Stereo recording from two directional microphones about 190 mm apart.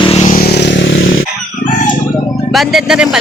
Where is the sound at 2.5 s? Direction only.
Centre (ahead or behind).